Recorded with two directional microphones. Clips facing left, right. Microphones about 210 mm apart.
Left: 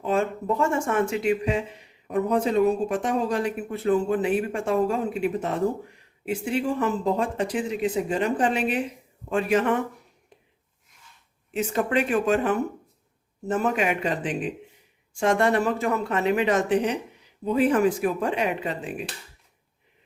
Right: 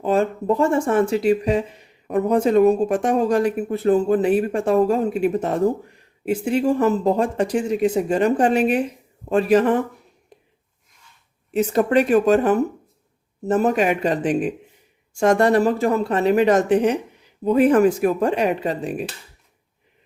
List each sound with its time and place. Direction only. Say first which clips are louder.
0.0 s speech: right 5 dB; 35° right (ahead or behind)
11.5 s speech: right 7 dB; 40° right (ahead or behind)